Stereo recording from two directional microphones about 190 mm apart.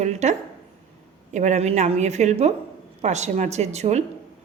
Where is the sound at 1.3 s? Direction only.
40° right (ahead or behind).